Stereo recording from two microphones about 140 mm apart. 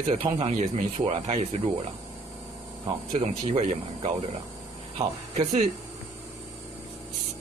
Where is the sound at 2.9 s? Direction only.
40° right (ahead or behind).